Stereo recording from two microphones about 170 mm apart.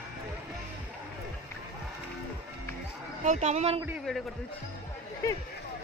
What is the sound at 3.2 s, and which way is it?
Speech, 45° right (ahead or behind).